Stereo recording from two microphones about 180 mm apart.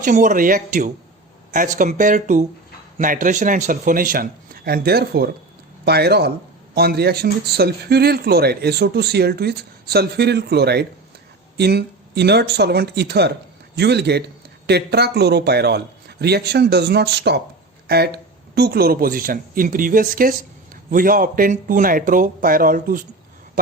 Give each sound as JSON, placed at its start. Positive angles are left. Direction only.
{"t": 0.0, "sound": "a man's voice", "side_deg": -45}